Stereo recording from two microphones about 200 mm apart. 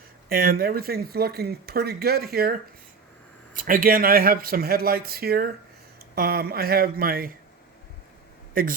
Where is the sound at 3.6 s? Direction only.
45° right (ahead or behind).